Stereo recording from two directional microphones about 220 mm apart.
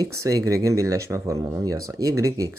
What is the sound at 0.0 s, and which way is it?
Speech, 15° right (ahead or behind).